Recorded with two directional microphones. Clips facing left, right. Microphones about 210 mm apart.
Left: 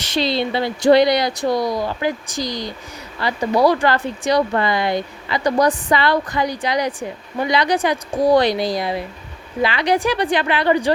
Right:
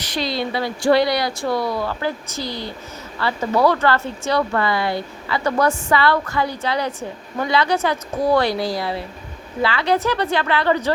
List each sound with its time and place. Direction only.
0.2 s speech: 25° left (ahead or behind)